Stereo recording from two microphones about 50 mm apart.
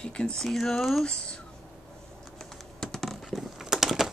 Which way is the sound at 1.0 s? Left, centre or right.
Centre.